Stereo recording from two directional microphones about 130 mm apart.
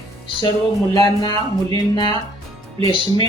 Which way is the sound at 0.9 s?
35° left (ahead or behind).